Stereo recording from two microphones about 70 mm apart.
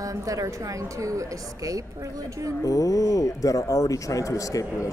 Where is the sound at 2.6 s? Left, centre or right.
Left.